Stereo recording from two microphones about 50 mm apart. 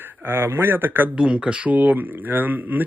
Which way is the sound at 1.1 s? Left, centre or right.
Right.